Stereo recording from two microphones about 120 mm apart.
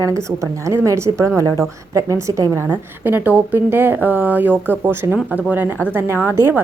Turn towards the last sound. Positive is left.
turn(degrees=-15)  # may be behind; listen again after turning